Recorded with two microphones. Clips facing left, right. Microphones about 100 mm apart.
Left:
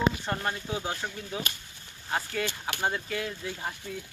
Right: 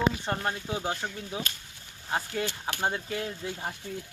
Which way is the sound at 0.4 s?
15° right (ahead or behind).